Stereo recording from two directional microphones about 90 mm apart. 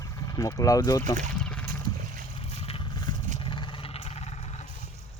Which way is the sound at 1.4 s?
10° left (ahead or behind).